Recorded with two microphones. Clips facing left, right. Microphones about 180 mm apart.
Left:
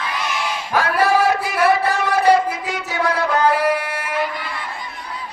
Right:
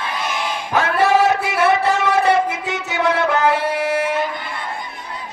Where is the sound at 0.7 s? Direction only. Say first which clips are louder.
Right 1 dB; 20° right (ahead or behind).